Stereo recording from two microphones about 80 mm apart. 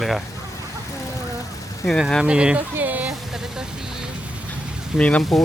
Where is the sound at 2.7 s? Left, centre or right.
Right.